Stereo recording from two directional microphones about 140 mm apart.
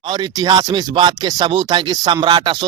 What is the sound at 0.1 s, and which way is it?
Speech, 30° right (ahead or behind).